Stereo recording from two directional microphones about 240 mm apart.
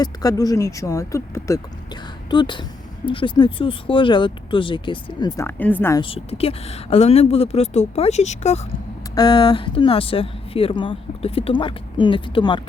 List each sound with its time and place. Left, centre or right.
0.0 s speech: centre
6.0 s speech: left